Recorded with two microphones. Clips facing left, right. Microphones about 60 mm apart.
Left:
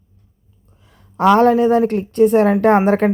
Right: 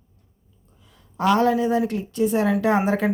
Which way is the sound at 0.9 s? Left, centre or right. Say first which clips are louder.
Left 7 dB; left.